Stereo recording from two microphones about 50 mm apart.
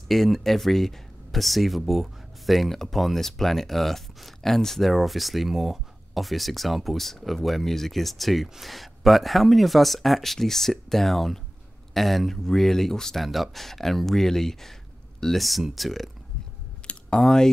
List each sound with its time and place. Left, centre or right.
0.1 s speech: centre
16.8 s typing: left
17.2 s speech: centre